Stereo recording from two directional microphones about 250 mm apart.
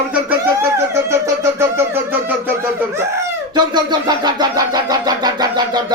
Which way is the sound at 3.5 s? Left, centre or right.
Centre.